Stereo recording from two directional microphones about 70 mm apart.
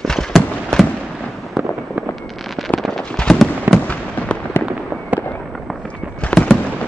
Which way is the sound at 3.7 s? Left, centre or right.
Right.